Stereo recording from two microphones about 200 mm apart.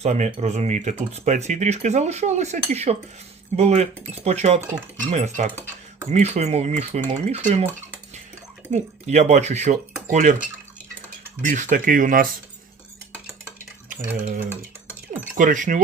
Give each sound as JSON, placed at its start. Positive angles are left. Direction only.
{"t": 0.0, "sound": "speech", "side_deg": -35}
{"t": 8.7, "sound": "speech", "side_deg": -35}
{"t": 11.4, "sound": "speech", "side_deg": -40}
{"t": 13.6, "sound": "stir", "side_deg": -45}
{"t": 15.4, "sound": "speech", "side_deg": -40}